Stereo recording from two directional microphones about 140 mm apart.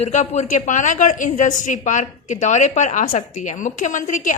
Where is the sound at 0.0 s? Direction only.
55° left (ahead or behind).